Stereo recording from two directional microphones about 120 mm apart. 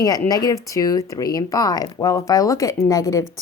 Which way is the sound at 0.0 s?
30° left (ahead or behind).